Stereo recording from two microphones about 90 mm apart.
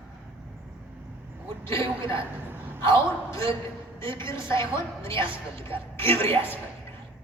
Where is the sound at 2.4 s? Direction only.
20° right (ahead or behind).